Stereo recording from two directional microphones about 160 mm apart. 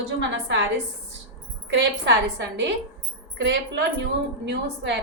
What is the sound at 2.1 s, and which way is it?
A woman's voice, 90° right.